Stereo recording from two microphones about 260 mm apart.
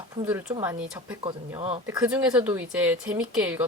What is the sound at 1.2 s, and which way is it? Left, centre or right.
Speech, right.